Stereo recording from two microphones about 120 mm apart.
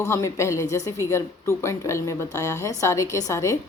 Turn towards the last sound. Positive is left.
turn(degrees=25)  # may be behind; listen again after turning